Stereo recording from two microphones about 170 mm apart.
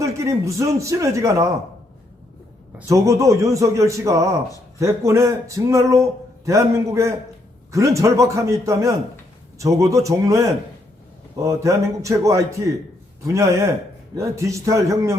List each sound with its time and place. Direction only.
0.0 s speech: 15° right (ahead or behind)
2.7 s a man's voice: 15° right (ahead or behind)